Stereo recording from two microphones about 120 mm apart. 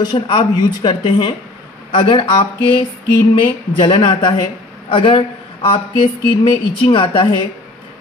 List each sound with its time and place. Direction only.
0.0 s a woman's voice: 40° left (ahead or behind)